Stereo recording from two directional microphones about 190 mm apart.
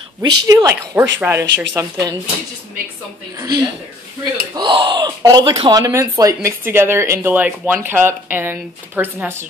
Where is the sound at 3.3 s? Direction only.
20° right (ahead or behind).